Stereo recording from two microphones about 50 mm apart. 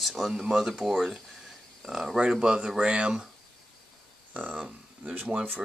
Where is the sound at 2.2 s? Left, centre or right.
Centre.